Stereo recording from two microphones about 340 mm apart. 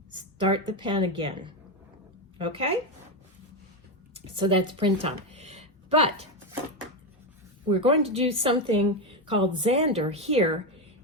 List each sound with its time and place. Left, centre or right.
0.2 s a woman's voice: centre
4.4 s speech: centre
7.7 s a woman's voice: centre